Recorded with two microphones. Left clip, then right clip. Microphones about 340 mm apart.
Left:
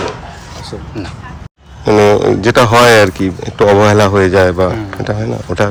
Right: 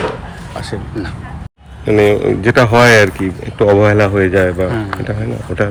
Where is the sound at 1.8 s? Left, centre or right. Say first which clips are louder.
Left 3 dB; centre.